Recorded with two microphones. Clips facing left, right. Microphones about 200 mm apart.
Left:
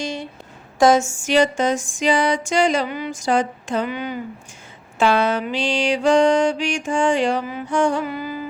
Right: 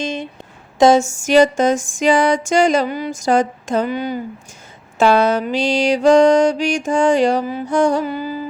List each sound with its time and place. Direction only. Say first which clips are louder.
0.0 s a sound: right 4 dB; 20° right (ahead or behind)
1.0 s music: right 5 dB; 45° right (ahead or behind)
4.9 s mantra: right 4 dB; 40° right (ahead or behind)